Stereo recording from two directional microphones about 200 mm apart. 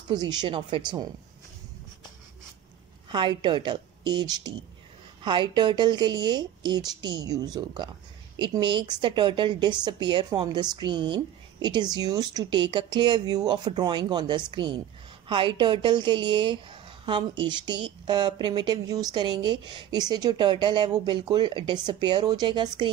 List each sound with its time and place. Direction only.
0.1 s a woman's voice: 20° right (ahead or behind)
3.1 s a woman's voice: 25° right (ahead or behind)